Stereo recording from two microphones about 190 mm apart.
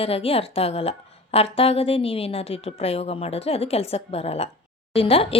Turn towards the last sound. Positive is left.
turn(degrees=30)  # may be behind; listen again after turning